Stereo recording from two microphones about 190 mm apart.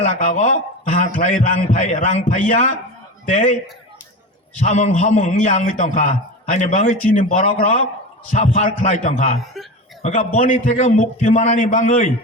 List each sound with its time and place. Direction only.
0.0 s a man's voice: 40° left (ahead or behind)
4.6 s a man's voice: 35° left (ahead or behind)